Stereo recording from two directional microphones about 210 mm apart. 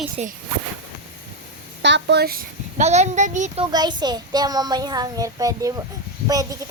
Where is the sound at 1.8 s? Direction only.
55° right (ahead or behind).